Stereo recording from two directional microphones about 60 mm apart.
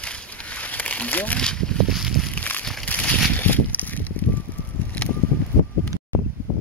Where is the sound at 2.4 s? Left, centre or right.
Left.